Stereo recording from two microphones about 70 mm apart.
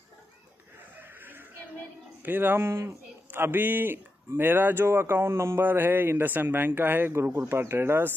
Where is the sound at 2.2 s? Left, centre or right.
Right.